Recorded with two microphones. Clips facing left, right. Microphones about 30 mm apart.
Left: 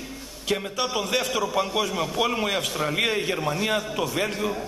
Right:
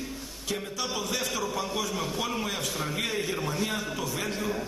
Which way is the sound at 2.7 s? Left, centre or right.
Left.